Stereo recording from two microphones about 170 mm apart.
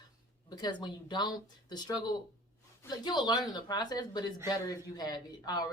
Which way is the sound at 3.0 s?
25° left (ahead or behind).